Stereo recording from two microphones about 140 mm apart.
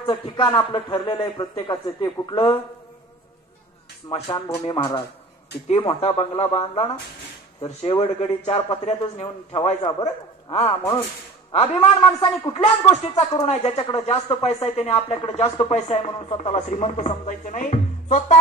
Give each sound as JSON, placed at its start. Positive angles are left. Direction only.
{"t": 0.0, "sound": "a man's voice", "side_deg": 35}
{"t": 4.1, "sound": "a man's voice", "side_deg": 40}
{"t": 10.0, "sound": "a man's voice", "side_deg": 50}
{"t": 16.5, "sound": "speech", "side_deg": 60}